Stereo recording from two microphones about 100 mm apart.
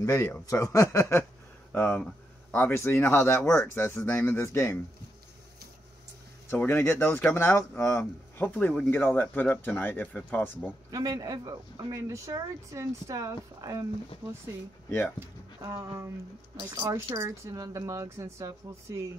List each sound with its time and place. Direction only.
0.0 s speech: 35° left (ahead or behind)
1.7 s speech: 15° left (ahead or behind)
6.5 s speech: 20° left (ahead or behind)
10.9 s speech: 35° right (ahead or behind)
14.9 s speech: 15° left (ahead or behind)
15.1 s speech: 30° right (ahead or behind)